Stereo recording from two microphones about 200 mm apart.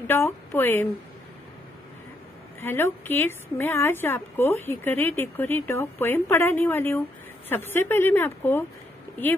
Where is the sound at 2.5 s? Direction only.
10° left (ahead or behind).